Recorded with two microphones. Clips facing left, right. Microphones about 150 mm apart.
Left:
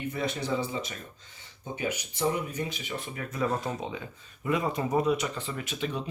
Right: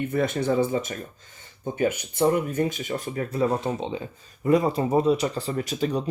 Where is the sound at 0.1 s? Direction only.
50° right (ahead or behind).